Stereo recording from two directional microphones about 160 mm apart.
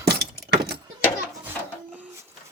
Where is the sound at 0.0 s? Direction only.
90° right.